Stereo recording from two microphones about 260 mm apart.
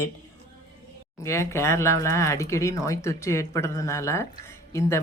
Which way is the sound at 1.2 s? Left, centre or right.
Centre.